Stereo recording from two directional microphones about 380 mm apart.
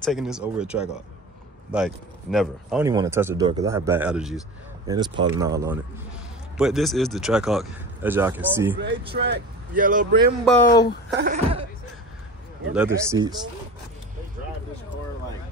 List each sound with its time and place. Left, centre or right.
0.0 s speech: centre
9.1 s speech: right
10.4 s speech: centre
11.1 s speech: centre
12.7 s speech: centre